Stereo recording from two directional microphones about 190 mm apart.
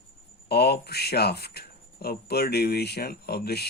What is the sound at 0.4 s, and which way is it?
Speech, 60° left (ahead or behind).